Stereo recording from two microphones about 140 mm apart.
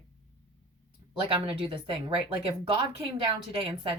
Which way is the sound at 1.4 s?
40° right (ahead or behind).